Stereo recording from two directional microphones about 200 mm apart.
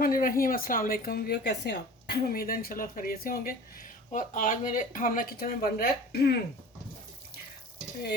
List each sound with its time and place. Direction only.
0.0 s a woman's voice: 45° left (ahead or behind)